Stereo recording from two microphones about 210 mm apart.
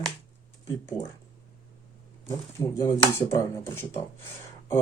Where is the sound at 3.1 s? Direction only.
10° left (ahead or behind).